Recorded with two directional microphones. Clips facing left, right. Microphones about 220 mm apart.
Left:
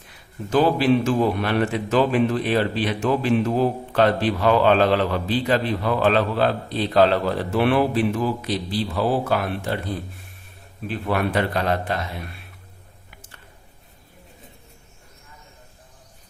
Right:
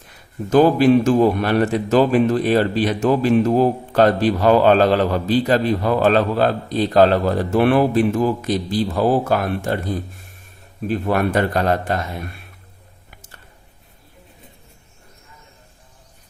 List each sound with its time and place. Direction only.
0.5 s a man's voice: 45° right (ahead or behind)